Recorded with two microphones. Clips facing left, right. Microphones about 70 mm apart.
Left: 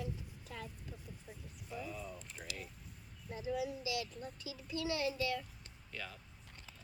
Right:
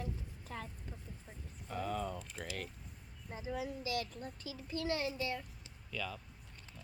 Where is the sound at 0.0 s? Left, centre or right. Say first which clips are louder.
Even; right.